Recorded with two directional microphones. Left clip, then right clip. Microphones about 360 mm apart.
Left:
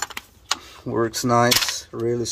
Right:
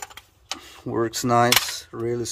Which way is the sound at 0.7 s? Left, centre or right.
Right.